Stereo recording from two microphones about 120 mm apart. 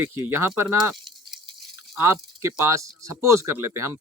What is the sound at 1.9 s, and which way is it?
Speech, 25° right (ahead or behind).